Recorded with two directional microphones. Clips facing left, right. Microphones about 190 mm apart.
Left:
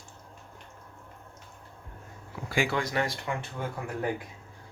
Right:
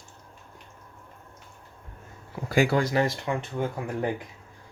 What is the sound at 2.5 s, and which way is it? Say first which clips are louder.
Speech: right 6 dB; 40° right (ahead or behind).